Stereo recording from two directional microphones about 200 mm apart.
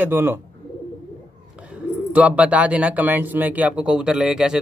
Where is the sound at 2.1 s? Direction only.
5° right (ahead or behind).